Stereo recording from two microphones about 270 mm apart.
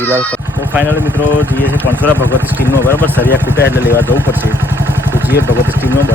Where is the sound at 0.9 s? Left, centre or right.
Centre.